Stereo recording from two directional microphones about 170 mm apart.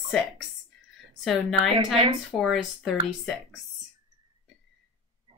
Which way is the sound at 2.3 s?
Centre (ahead or behind).